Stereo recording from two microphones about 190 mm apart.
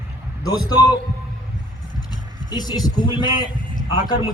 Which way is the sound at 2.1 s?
20° left (ahead or behind).